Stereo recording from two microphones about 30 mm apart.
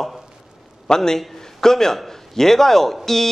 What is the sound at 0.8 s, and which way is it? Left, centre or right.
A man's voice, centre.